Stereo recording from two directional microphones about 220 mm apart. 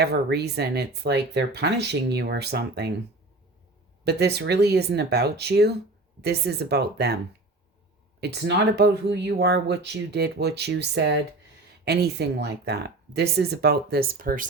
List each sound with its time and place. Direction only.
0.0 s speech: 45° right (ahead or behind)
4.0 s speech: 50° right (ahead or behind)
8.2 s speech: 50° right (ahead or behind)